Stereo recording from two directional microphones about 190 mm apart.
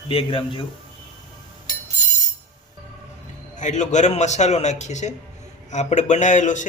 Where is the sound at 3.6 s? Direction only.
40° left (ahead or behind).